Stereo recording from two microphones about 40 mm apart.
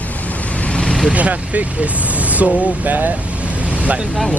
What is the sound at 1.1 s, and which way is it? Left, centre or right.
Speech, right.